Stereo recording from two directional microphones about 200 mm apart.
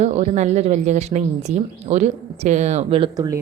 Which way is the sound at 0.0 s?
35° right (ahead or behind).